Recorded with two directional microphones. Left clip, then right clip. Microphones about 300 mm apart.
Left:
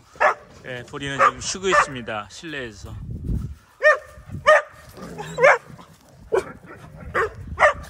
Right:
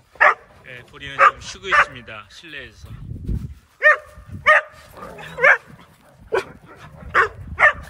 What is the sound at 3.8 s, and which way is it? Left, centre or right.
Dog, centre.